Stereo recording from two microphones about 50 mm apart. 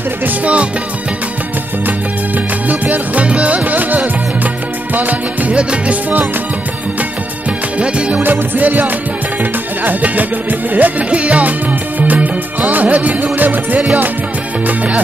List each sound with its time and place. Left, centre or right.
1.9 s music: right
7.8 s music: right
8.2 s music: right